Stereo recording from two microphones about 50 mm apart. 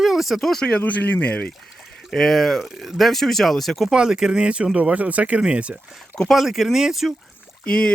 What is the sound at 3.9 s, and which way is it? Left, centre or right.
Speech, centre.